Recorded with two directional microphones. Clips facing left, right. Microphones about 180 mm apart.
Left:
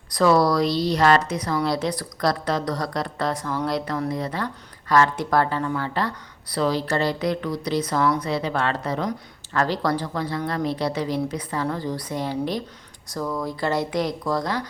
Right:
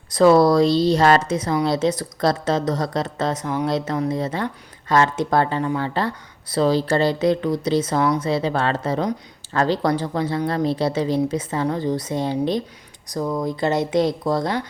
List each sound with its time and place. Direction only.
0.1 s speech: 25° right (ahead or behind)